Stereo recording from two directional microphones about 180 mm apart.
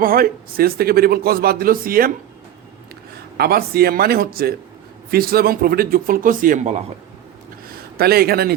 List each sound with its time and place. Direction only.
0.0 s a man's voice: 55° right (ahead or behind)
3.3 s a man's voice: 60° right (ahead or behind); by 6.8 s 40° right (ahead or behind)
7.9 s a man's voice: 60° right (ahead or behind)